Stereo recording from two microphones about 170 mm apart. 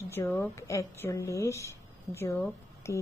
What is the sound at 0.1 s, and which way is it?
Speech, 15° left (ahead or behind).